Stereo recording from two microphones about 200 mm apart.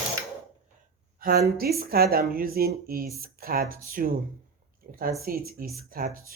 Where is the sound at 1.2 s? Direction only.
50° right (ahead or behind).